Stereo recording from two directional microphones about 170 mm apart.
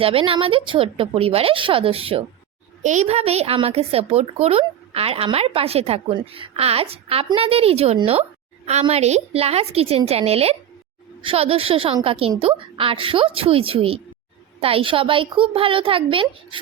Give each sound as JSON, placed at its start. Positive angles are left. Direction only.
{"t": 0.0, "sound": "speech", "side_deg": -35}